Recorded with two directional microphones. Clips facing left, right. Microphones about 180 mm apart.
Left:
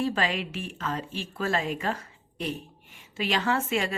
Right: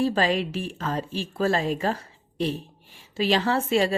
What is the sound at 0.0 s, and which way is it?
A woman's voice, 35° right (ahead or behind).